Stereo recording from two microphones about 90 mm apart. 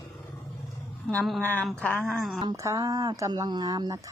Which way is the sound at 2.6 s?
40° right (ahead or behind).